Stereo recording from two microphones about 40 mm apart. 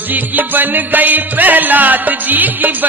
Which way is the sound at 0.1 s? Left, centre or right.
Right.